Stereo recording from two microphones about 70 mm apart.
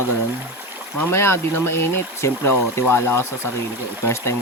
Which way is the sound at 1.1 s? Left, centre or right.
Left.